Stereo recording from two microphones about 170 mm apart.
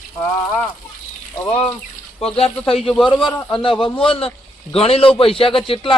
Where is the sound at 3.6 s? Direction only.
30° left (ahead or behind).